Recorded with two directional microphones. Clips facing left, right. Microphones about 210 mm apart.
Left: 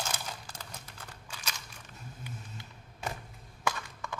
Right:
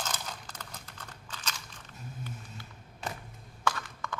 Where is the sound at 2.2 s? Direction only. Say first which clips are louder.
Right 1 dB; 15° left (ahead or behind).